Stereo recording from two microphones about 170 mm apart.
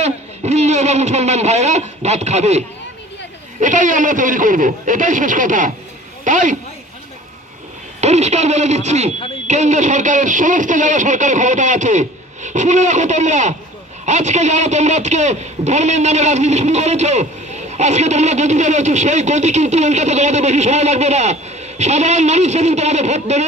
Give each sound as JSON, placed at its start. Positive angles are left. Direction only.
{"t": 0.0, "sound": "speech", "side_deg": -40}
{"t": 8.0, "sound": "speech", "side_deg": -40}